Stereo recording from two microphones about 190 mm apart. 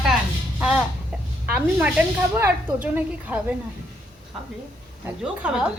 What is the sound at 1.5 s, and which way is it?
Speech, 10° right (ahead or behind).